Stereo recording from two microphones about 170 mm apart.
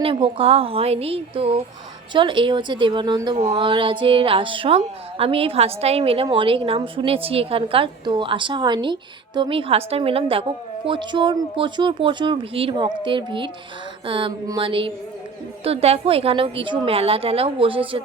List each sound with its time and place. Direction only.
0.0 s a woman's voice: 30° right (ahead or behind)
3.3 s a woman's voice: 35° right (ahead or behind)